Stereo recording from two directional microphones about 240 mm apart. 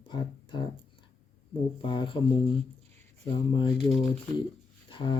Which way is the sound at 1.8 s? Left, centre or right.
Centre.